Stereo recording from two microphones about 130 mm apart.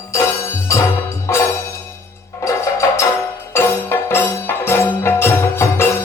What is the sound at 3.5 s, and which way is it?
Music, 20° left (ahead or behind).